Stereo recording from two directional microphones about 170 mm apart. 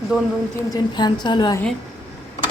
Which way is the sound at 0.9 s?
25° left (ahead or behind).